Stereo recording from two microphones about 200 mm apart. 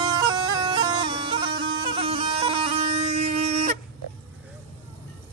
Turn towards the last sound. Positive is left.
turn(degrees=-35)  # may be behind; listen again after turning